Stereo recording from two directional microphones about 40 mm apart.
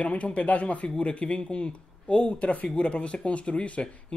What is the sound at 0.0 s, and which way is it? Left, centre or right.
Speech, left.